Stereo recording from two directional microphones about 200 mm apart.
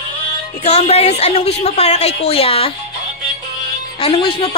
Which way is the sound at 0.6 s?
30° left (ahead or behind).